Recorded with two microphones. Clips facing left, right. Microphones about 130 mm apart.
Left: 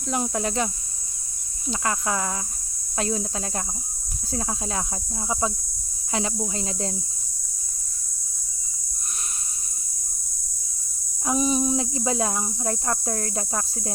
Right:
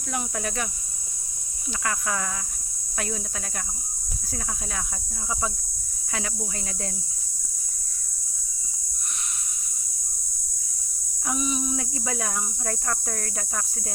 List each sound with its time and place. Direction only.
0.1 s speech: 25° left (ahead or behind)
1.8 s speech: 25° left (ahead or behind)
4.3 s speech: 30° left (ahead or behind)
6.1 s speech: 25° left (ahead or behind)
11.3 s speech: 35° left (ahead or behind)